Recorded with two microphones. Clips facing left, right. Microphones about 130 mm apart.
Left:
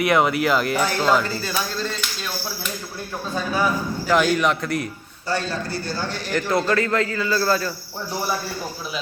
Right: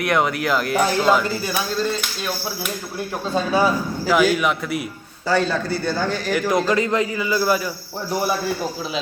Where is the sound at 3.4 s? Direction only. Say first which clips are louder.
Right 4 dB; 25° right (ahead or behind).